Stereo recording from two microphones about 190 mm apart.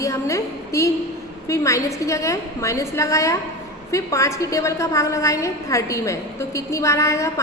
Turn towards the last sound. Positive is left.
turn(degrees=15)  # may be behind; listen again after turning